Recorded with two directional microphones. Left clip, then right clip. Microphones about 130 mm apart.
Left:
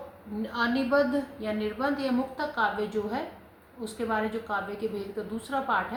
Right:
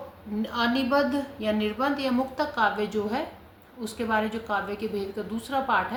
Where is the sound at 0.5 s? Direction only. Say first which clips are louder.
Right 1 dB; 55° right (ahead or behind).